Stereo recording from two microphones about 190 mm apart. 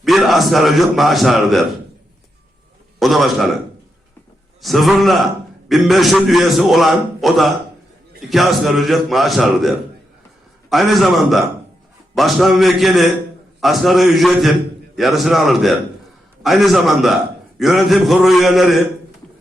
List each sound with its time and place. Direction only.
0.0 s a man's voice: centre (ahead or behind)
3.0 s a man's voice: centre (ahead or behind)
4.6 s a man's voice: centre (ahead or behind)